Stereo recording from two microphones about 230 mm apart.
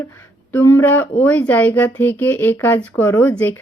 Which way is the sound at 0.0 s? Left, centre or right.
Centre.